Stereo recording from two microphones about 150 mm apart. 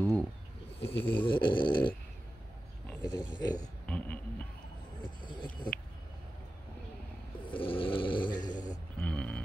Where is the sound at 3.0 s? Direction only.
30° left (ahead or behind).